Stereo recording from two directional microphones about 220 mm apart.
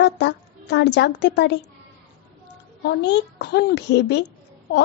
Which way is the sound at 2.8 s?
50° left (ahead or behind).